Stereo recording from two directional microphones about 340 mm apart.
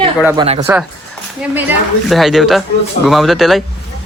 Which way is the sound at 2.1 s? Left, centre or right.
Centre.